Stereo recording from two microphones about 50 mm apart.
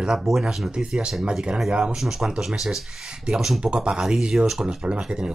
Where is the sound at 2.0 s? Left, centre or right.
Centre.